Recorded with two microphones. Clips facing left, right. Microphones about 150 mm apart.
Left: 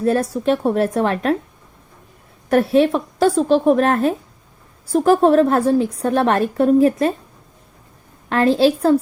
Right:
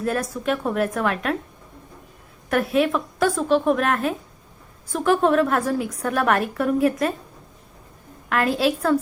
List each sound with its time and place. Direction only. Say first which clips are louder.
0.0 s a woman's voice: left 7 dB; 30° left (ahead or behind)
2.5 s a woman's voice: left 6 dB; 30° left (ahead or behind)
8.3 s a woman's voice: left 6 dB; 30° left (ahead or behind)